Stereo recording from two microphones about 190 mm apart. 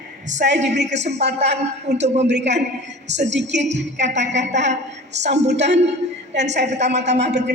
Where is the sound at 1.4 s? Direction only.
35° right (ahead or behind).